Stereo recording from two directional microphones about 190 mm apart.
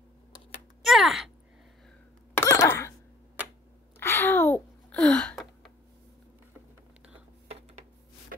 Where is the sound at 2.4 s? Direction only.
15° left (ahead or behind).